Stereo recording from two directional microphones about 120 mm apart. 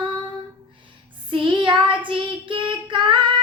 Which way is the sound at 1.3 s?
45° right (ahead or behind).